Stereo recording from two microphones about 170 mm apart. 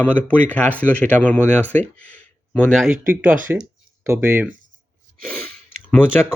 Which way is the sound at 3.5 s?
15° right (ahead or behind).